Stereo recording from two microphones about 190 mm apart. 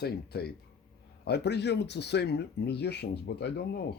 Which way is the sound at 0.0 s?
55° left (ahead or behind).